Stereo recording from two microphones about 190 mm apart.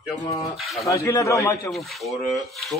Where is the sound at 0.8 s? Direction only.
15° left (ahead or behind).